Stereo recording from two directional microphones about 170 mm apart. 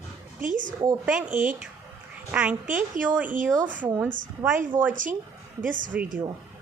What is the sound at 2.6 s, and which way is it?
Speech, 50° right (ahead or behind).